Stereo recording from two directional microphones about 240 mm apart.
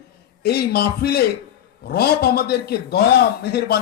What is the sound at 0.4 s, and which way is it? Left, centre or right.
Speech, left.